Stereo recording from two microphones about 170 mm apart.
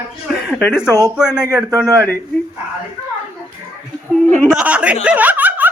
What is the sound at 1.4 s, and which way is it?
Speech, 20° right (ahead or behind).